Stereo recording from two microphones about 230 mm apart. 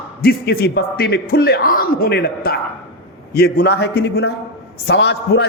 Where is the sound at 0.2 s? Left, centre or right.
Left.